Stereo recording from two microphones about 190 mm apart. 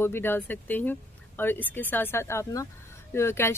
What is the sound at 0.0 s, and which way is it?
A woman's voice, 10° left (ahead or behind).